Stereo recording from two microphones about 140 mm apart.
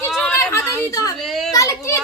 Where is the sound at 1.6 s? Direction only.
20° left (ahead or behind).